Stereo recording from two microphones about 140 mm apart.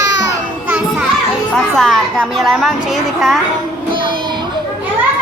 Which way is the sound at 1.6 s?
Centre (ahead or behind).